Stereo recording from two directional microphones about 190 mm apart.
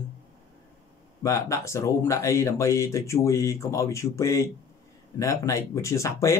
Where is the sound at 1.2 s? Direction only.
15° left (ahead or behind).